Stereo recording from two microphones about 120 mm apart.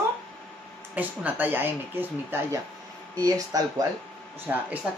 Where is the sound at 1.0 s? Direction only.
15° right (ahead or behind).